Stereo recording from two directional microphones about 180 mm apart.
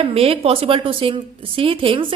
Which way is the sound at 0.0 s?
30° right (ahead or behind).